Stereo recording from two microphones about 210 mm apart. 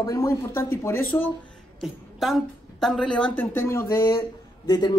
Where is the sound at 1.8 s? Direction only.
Centre (ahead or behind).